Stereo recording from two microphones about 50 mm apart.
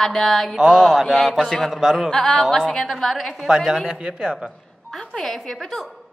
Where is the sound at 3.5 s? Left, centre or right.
Centre.